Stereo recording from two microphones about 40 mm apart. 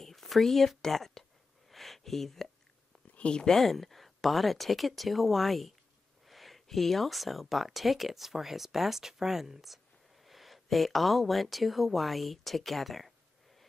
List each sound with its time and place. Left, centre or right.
0.0 s speech: centre
1.7 s a sound: centre
3.2 s speech: left
3.5 s speech: centre